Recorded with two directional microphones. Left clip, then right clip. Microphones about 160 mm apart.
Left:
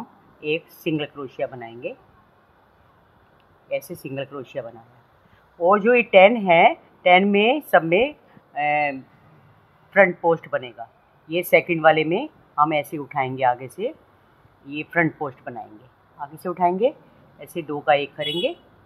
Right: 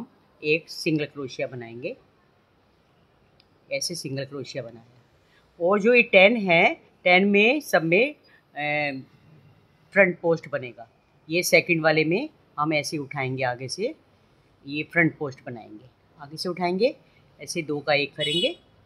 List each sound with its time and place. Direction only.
0.4 s speech: 35° right (ahead or behind)
4.0 s speech: 30° right (ahead or behind)
9.9 s speech: 35° right (ahead or behind)